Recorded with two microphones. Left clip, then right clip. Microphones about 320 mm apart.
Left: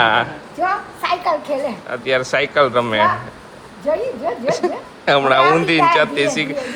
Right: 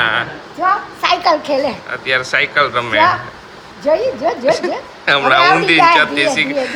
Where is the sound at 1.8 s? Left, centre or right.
Centre.